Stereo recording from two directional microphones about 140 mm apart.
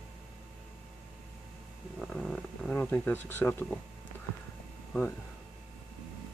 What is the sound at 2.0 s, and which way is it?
Speech, 5° left (ahead or behind).